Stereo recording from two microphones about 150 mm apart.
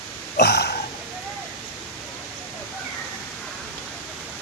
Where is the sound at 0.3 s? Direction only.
90° left.